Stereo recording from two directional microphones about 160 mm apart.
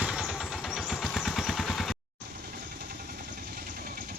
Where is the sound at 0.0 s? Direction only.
5° right (ahead or behind).